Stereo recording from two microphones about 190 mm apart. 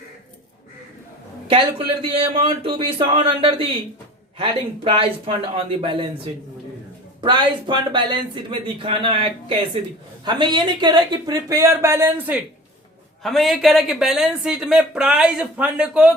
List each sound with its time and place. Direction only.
1.5 s speech: 30° right (ahead or behind); by 16.1 s 5° right (ahead or behind)